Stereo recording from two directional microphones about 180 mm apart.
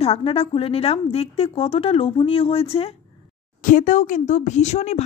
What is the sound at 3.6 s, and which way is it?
Speech, 45° left (ahead or behind).